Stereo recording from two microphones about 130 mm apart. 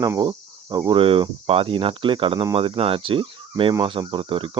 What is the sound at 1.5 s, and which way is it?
Speech, 45° right (ahead or behind).